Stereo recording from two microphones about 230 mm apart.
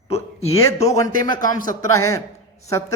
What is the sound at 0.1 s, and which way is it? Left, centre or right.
Speech, left.